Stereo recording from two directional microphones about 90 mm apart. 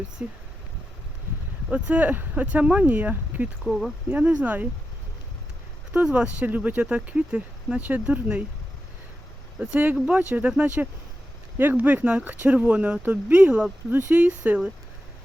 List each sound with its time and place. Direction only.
0.2 s speech: 15° right (ahead or behind)
1.7 s speech: 15° right (ahead or behind)
3.6 s speech: centre (ahead or behind)
4.1 s speech: 15° right (ahead or behind)
5.9 s speech: 15° right (ahead or behind)
9.6 s speech: 15° right (ahead or behind)